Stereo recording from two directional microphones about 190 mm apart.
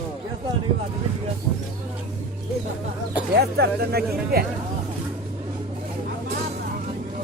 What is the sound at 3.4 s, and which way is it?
Speech, 60° right (ahead or behind).